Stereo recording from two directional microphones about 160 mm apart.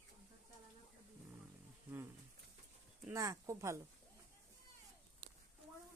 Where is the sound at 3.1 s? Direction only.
20° right (ahead or behind).